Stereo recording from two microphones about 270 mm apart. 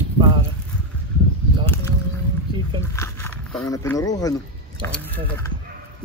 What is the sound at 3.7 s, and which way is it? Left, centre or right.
Speech, centre.